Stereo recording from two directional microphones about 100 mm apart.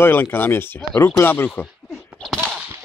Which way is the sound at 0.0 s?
20° left (ahead or behind).